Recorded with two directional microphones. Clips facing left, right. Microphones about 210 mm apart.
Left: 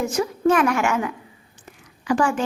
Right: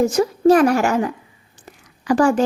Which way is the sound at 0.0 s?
35° right (ahead or behind).